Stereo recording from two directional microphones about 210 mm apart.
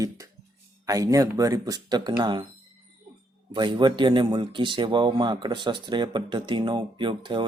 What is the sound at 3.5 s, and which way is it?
A man's voice, 20° right (ahead or behind).